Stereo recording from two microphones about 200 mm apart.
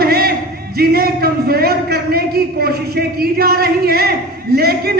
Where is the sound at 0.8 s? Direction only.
50° right (ahead or behind).